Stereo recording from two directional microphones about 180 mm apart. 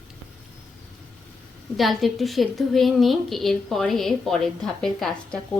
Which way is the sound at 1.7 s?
Centre (ahead or behind).